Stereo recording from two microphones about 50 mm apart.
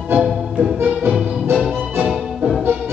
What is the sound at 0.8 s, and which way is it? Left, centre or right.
Music, right.